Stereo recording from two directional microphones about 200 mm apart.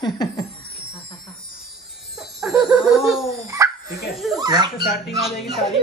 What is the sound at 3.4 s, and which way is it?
Dog, 15° right (ahead or behind).